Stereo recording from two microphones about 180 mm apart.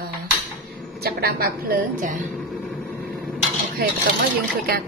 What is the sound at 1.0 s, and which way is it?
A woman's voice, 60° right (ahead or behind).